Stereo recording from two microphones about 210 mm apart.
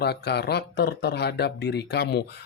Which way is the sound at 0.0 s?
50° left (ahead or behind).